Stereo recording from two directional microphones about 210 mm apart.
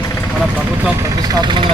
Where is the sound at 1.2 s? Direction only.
20° right (ahead or behind).